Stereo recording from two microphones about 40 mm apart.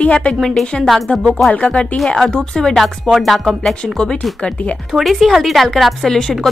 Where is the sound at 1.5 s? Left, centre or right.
Left.